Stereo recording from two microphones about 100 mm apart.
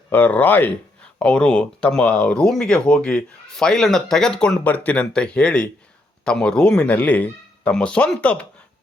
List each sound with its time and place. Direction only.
0.1 s speech: 15° left (ahead or behind)